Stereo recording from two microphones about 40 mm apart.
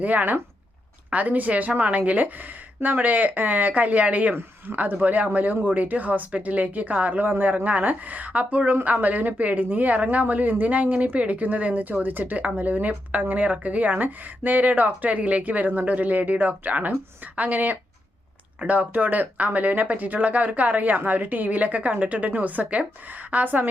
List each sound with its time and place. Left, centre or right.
0.0 s speech: right
4.6 s speech: right
7.3 s speech: right